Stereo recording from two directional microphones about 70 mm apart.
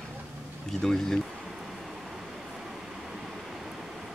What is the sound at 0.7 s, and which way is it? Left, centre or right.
Speech, centre.